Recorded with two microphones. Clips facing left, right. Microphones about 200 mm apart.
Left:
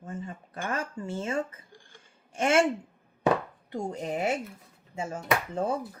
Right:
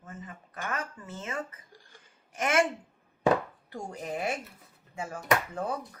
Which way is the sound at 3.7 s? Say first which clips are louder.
Left 5 dB; 20° left (ahead or behind).